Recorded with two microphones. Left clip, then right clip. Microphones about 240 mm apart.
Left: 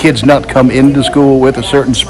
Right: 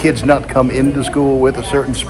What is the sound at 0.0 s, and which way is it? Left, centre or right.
A man's voice, left.